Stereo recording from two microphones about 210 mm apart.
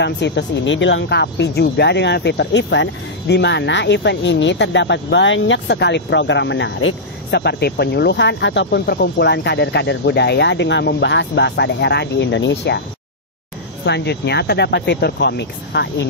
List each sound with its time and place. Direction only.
0.0 s speech: 55° left (ahead or behind)
13.8 s speech: 55° left (ahead or behind)